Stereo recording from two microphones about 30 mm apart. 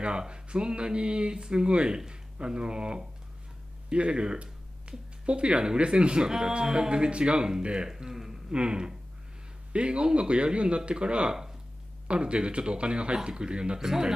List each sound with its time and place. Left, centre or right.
0.3 s speech: right
8.1 s a sound: centre
8.5 s speech: right
13.7 s speech: centre